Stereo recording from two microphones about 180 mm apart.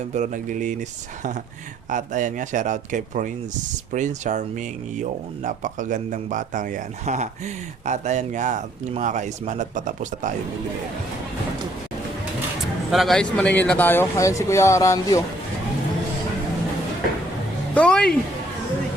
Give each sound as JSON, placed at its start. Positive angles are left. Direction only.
{"t": 0.1, "sound": "speech", "side_deg": -45}
{"t": 1.9, "sound": "speech", "side_deg": -45}
{"t": 12.9, "sound": "speech", "side_deg": 0}
{"t": 17.7, "sound": "a woman's voice", "side_deg": 5}